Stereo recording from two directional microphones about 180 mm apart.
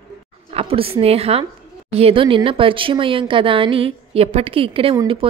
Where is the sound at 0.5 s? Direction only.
35° right (ahead or behind).